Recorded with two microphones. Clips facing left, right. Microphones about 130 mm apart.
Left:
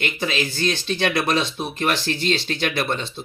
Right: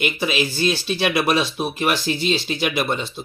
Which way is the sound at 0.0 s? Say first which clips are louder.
Right 3 dB; 15° right (ahead or behind).